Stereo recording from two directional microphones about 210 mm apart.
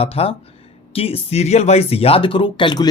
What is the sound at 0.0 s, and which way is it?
Speech, 30° left (ahead or behind).